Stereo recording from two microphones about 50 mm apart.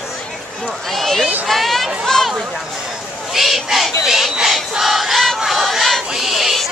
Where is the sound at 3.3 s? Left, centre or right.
Centre.